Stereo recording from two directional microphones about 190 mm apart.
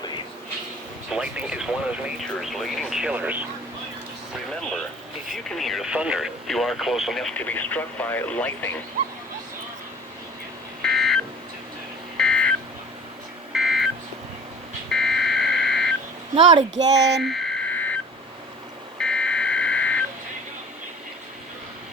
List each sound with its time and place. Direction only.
1.1 s speech: 5° right (ahead or behind)
5.3 s speech: centre (ahead or behind)
10.8 s beep: centre (ahead or behind)
12.1 s a sound: 5° left (ahead or behind)
14.8 s buzzer: 5° left (ahead or behind)
16.3 s speech: 25° right (ahead or behind)
16.9 s speech: 65° right (ahead or behind)
17.2 s a sound: centre (ahead or behind)
18.9 s buzzer: 5° left (ahead or behind)